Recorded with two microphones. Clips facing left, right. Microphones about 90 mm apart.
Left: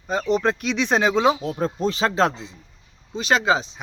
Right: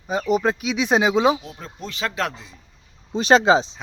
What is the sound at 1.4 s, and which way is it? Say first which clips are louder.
Speech: left 12 dB; 40° left (ahead or behind).